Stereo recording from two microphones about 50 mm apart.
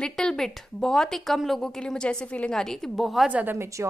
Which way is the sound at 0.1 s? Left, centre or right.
Centre.